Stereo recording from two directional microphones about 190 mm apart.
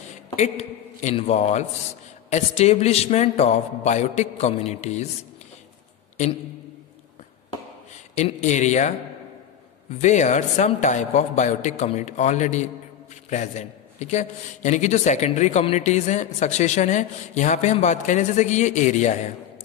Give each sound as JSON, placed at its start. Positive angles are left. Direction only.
{"t": 0.4, "sound": "a man's voice", "side_deg": 35}
{"t": 8.1, "sound": "a man's voice", "side_deg": 40}
{"t": 9.9, "sound": "a man's voice", "side_deg": 40}